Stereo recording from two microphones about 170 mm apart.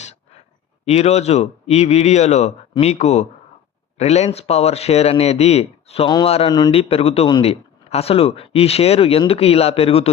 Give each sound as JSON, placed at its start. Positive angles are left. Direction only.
{"t": 0.9, "sound": "speech", "side_deg": 40}